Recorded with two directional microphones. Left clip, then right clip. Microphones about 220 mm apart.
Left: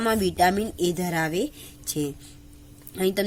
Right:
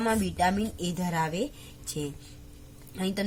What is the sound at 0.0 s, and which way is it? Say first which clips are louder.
Speech: left 5 dB; 40° left (ahead or behind).